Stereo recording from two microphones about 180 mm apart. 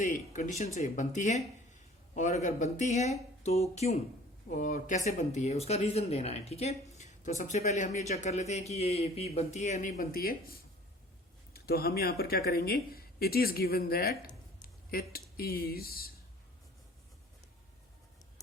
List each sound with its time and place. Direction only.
0.0 s speech: 45° left (ahead or behind)